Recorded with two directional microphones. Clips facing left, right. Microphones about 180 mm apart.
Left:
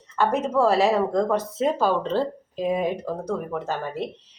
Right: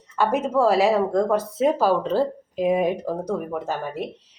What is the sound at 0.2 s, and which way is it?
Speech, 10° right (ahead or behind).